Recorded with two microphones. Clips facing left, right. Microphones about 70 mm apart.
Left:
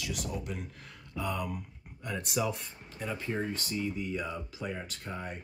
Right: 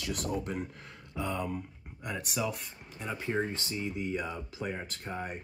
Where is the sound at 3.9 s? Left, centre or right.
Right.